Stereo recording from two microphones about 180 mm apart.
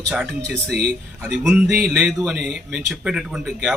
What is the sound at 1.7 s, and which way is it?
A man's voice, centre (ahead or behind).